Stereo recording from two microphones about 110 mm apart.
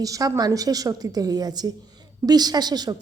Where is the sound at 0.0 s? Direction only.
35° right (ahead or behind).